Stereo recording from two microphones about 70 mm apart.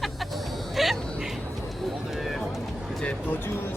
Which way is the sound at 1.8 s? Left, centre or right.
Centre.